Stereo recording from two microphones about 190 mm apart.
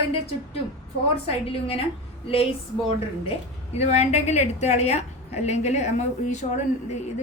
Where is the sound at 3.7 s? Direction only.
35° left (ahead or behind).